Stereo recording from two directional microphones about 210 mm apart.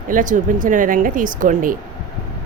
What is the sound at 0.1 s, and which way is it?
Speech, 40° right (ahead or behind).